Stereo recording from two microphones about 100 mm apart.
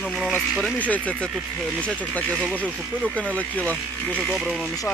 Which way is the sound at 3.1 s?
15° left (ahead or behind).